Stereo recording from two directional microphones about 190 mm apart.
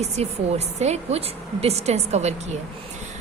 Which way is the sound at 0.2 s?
35° right (ahead or behind).